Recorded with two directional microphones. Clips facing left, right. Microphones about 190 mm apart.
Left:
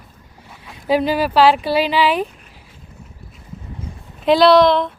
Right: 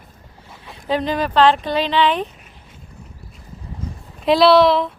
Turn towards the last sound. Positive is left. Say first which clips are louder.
# left 1 dB
turn(degrees=-5)  # may be behind; listen again after turning